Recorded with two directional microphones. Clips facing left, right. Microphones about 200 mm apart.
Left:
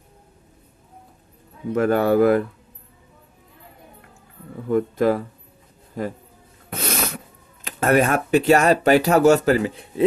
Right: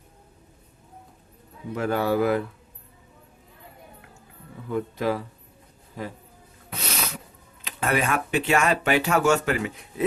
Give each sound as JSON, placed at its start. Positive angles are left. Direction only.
{"t": 1.7, "sound": "speech", "side_deg": 50}
{"t": 4.7, "sound": "speech", "side_deg": 50}
{"t": 6.7, "sound": "sneeze", "side_deg": 50}
{"t": 7.6, "sound": "speech", "side_deg": 45}